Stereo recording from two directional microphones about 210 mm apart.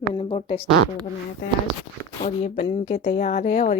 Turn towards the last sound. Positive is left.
turn(degrees=35)  # may be behind; listen again after turning